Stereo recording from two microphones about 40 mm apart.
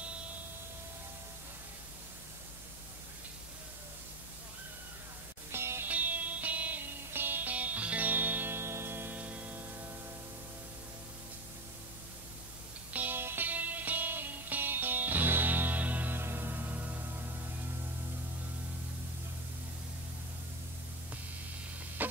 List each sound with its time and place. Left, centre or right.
5.5 s music: right
5.9 s music: right
7.1 s music: right
7.5 s music: right
8.1 s music: right
8.5 s music: right
9.1 s music: right
13.1 s music: right
13.5 s music: right
16.2 s music: right
22.0 s a sound: right